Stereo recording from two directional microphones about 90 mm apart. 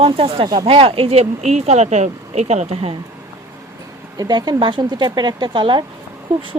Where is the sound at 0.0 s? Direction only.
90° right.